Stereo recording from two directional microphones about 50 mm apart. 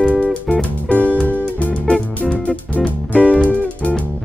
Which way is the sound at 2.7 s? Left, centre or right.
Left.